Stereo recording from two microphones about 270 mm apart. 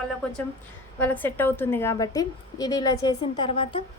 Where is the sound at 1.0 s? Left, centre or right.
Centre.